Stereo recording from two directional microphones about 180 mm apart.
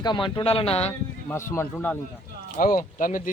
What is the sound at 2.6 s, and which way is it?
Speech, 50° left (ahead or behind).